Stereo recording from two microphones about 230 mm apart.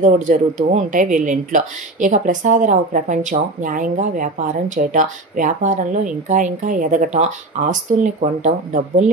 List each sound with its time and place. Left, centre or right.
0.0 s speech: right